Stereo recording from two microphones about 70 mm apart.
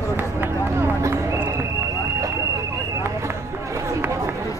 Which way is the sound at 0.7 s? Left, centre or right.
Right.